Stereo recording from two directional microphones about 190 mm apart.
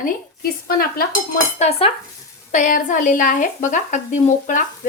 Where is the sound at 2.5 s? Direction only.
45° left (ahead or behind).